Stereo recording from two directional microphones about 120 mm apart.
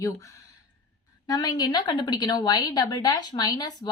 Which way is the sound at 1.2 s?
35° left (ahead or behind).